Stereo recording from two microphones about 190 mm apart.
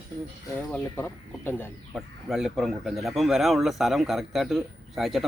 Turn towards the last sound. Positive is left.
turn(degrees=0)  # may be behind; listen again after turning